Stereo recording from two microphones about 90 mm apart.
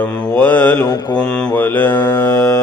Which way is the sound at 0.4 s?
20° left (ahead or behind).